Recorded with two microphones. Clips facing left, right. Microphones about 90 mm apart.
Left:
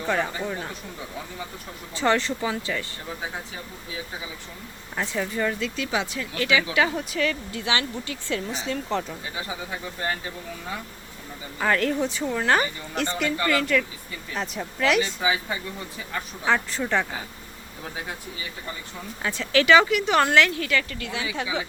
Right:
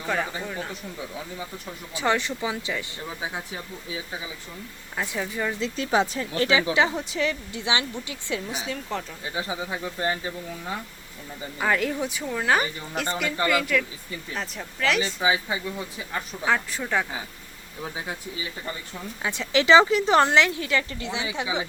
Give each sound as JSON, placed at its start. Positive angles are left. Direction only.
{"t": 0.0, "sound": "speech", "side_deg": 0}
{"t": 1.9, "sound": "speech", "side_deg": -10}
{"t": 4.9, "sound": "speech", "side_deg": -5}
{"t": 5.5, "sound": "speech", "side_deg": -30}
{"t": 8.5, "sound": "speech", "side_deg": -5}
{"t": 10.0, "sound": "speech", "side_deg": -20}
{"t": 11.6, "sound": "speech", "side_deg": -5}
{"t": 15.2, "sound": "speech", "side_deg": -20}
{"t": 16.5, "sound": "speech", "side_deg": -5}
{"t": 19.2, "sound": "speech", "side_deg": -15}